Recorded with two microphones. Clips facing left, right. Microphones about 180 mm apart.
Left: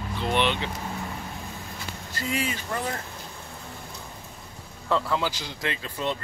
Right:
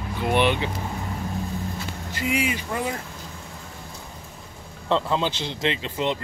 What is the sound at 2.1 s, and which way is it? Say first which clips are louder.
Speech: right 4 dB; 15° right (ahead or behind).